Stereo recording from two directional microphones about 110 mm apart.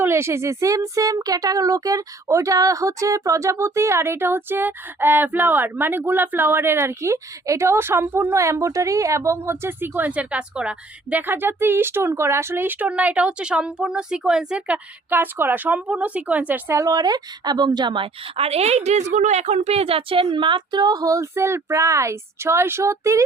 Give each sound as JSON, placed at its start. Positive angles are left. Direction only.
{"t": 0.0, "sound": "speech", "side_deg": -20}
{"t": 16.7, "sound": "a woman's voice", "side_deg": -35}